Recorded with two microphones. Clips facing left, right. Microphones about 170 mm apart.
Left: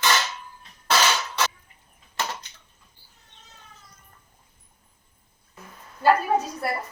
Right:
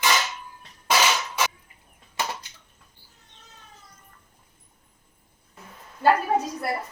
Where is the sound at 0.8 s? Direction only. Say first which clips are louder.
Even; 10° right (ahead or behind).